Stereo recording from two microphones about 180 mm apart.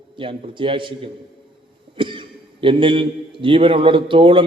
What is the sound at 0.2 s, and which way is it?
A man's voice, 30° right (ahead or behind).